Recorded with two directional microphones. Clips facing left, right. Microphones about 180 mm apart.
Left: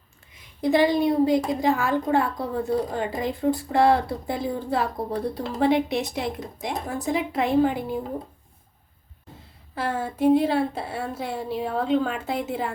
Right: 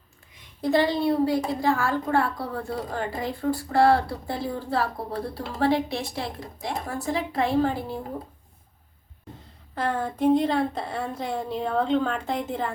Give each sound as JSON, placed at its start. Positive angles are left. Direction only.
{"t": 0.6, "sound": "a woman's voice", "side_deg": 15}
{"t": 9.7, "sound": "a woman's voice", "side_deg": 5}